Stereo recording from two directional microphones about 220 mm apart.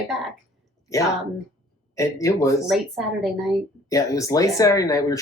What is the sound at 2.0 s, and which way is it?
Speech, 15° left (ahead or behind).